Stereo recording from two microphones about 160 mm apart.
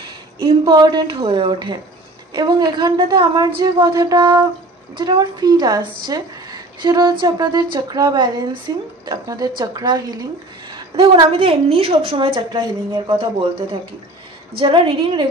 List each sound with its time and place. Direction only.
0.4 s a woman's voice: 25° right (ahead or behind)